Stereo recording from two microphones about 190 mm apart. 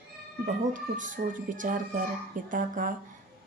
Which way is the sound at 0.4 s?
45° right (ahead or behind).